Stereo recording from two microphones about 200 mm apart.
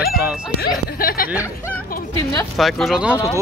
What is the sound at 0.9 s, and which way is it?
Speech, 45° left (ahead or behind).